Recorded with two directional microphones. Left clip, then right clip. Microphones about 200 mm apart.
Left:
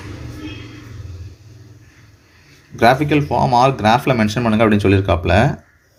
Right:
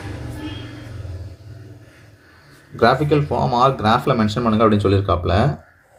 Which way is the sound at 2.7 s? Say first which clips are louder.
Left 2 dB; 45° left (ahead or behind).